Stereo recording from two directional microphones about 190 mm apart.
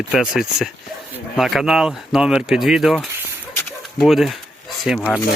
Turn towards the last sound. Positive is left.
turn(degrees=0)  # may be behind; listen again after turning